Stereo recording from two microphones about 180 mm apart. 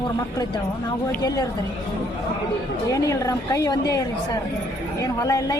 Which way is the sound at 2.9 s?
20° left (ahead or behind).